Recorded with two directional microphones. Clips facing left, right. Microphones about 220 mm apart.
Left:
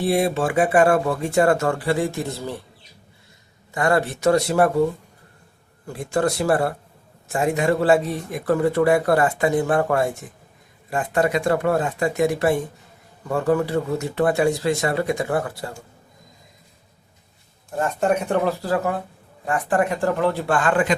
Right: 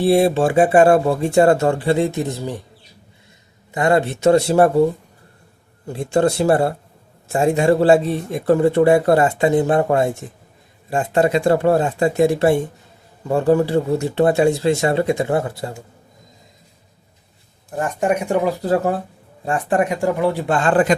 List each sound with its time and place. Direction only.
0.0 s a man's voice: 30° right (ahead or behind)
3.7 s a man's voice: 20° right (ahead or behind)
5.9 s a man's voice: 25° right (ahead or behind)
17.7 s speech: 15° right (ahead or behind)
20.5 s a man's voice: 30° right (ahead or behind)